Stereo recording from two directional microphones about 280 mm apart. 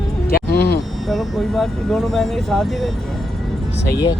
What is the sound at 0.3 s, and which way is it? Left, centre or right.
Music, left.